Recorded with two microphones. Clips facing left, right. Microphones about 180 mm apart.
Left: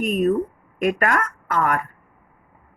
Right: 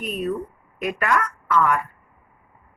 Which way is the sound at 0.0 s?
45° left (ahead or behind).